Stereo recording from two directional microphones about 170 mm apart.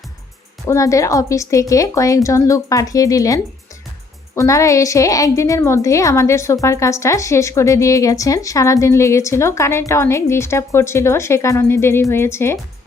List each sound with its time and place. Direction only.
0.7 s a woman's voice: 20° left (ahead or behind)